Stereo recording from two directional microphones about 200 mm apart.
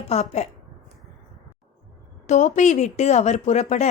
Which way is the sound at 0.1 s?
35° left (ahead or behind).